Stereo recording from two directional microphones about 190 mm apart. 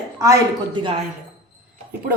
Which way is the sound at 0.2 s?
20° right (ahead or behind).